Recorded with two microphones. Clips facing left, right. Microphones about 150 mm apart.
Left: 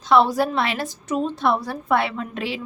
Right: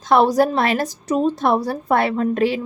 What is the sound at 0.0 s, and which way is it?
A woman's voice, 50° right (ahead or behind).